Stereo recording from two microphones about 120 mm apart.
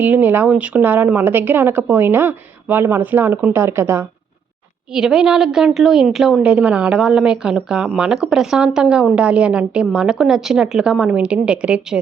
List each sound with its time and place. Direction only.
0.0 s a woman's voice: 15° right (ahead or behind)
4.9 s a woman's voice: 5° right (ahead or behind)